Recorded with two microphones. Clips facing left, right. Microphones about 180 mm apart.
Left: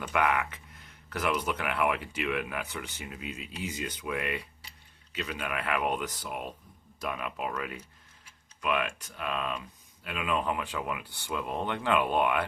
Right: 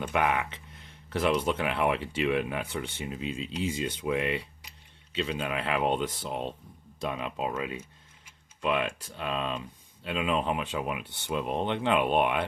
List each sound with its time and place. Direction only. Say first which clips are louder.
0.1 s speech: left 1 dB; 25° right (ahead or behind)